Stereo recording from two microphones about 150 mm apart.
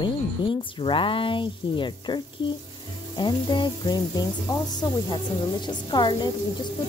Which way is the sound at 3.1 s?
30° left (ahead or behind).